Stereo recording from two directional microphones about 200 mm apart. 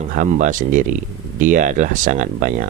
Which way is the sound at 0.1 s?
40° right (ahead or behind).